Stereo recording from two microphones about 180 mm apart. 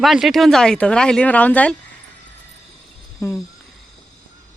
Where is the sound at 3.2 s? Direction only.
15° left (ahead or behind).